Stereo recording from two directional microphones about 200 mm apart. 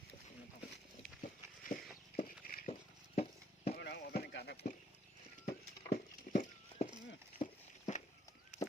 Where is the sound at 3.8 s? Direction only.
55° left (ahead or behind).